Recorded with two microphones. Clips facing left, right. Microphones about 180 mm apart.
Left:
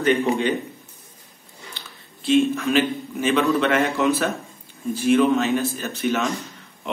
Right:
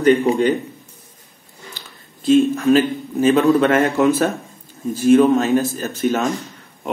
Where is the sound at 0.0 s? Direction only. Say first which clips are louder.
Right 5 dB; 35° right (ahead or behind).